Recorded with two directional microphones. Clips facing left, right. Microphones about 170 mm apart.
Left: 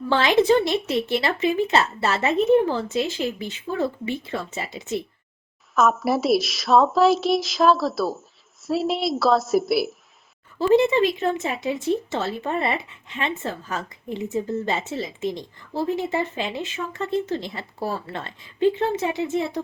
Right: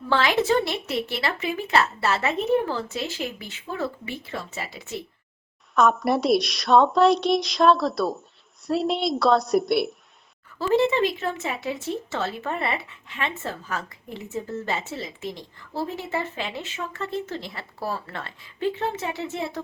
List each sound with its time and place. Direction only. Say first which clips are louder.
0.1 s speech: left 4 dB; 20° left (ahead or behind)
5.7 s a woman's voice: even; centre (ahead or behind)
10.8 s speech: right 1 dB; 15° left (ahead or behind)